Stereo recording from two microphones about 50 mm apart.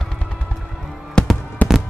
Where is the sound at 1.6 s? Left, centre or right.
Left.